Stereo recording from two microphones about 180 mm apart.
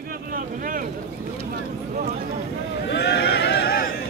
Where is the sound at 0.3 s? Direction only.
50° right (ahead or behind).